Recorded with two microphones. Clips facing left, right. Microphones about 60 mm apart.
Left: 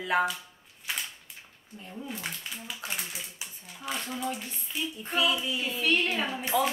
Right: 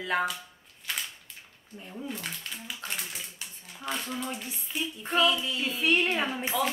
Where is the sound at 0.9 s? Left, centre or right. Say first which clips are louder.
Even; centre.